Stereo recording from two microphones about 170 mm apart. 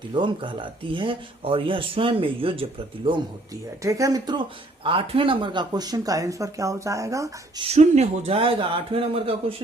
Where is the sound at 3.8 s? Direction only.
20° right (ahead or behind).